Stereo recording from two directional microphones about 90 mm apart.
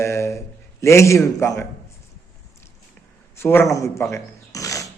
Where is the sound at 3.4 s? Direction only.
25° left (ahead or behind).